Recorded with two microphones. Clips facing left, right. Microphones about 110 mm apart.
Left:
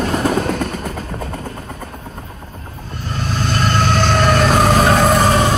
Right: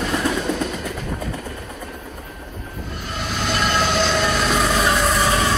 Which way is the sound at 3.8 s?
50° left (ahead or behind).